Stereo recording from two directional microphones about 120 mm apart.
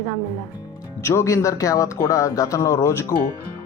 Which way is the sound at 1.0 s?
25° left (ahead or behind).